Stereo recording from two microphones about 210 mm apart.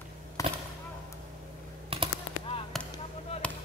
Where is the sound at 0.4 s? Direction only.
15° left (ahead or behind).